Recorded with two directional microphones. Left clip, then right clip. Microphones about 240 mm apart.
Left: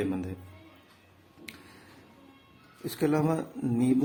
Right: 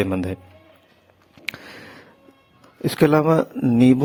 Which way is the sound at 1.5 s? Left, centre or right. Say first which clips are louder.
Right 16 dB; right.